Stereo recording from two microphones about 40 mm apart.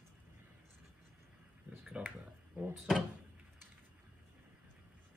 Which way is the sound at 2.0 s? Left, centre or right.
Right.